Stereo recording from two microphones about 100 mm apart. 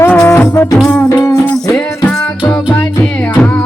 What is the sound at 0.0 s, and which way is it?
Music, 20° left (ahead or behind).